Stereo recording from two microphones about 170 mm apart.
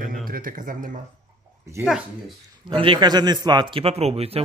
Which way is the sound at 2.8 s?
30° right (ahead or behind).